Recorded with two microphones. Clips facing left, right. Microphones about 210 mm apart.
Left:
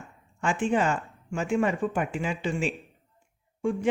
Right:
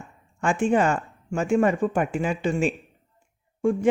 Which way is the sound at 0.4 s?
45° right (ahead or behind).